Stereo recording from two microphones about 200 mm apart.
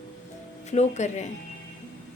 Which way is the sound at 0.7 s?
35° left (ahead or behind).